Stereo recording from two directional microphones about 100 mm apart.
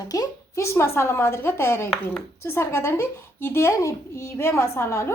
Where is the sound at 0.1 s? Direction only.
35° left (ahead or behind).